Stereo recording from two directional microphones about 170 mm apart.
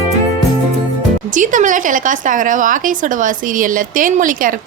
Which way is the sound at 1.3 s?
50° right (ahead or behind).